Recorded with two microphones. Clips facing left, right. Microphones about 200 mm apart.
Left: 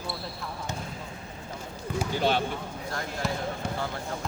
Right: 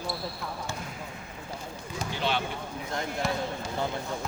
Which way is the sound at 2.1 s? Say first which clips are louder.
Left 4 dB; 45° left (ahead or behind).